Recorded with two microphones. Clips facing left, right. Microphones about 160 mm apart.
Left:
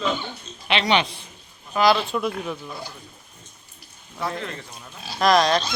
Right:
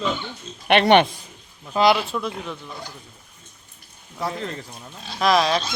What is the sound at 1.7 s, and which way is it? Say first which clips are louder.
Speech: right 1 dB; 25° right (ahead or behind).